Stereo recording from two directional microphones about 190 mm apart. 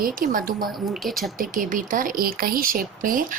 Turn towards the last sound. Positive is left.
turn(degrees=-45)  # may be behind; listen again after turning